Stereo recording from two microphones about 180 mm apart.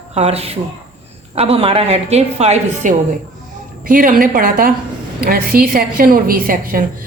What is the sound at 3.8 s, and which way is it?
A woman's voice, 50° right (ahead or behind).